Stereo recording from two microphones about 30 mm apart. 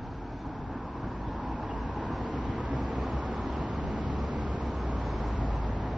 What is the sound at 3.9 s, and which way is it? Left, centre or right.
Vehicle, right.